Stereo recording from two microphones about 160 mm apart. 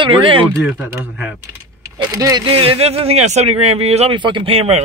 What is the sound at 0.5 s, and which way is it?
Speech, 5° right (ahead or behind).